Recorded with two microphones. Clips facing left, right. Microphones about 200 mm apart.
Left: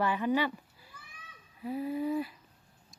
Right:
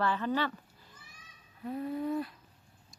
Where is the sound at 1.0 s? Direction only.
60° left (ahead or behind).